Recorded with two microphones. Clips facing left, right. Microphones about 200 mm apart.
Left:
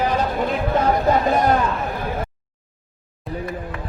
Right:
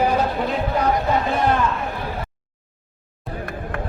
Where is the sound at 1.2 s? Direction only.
40° left (ahead or behind).